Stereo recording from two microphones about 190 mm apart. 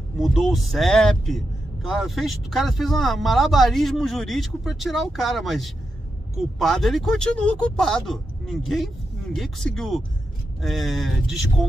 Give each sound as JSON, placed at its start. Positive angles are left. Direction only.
{"t": 0.2, "sound": "a man's voice", "side_deg": 0}